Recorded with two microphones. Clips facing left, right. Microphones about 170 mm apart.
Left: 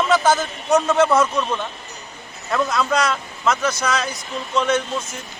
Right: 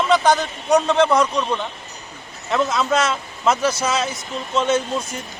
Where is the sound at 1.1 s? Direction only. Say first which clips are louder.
Even; 15° right (ahead or behind).